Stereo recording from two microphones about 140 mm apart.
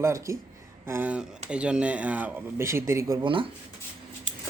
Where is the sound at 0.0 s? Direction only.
20° right (ahead or behind).